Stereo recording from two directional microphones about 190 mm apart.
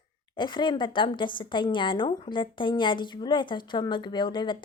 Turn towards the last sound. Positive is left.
turn(degrees=25)  # may be behind; listen again after turning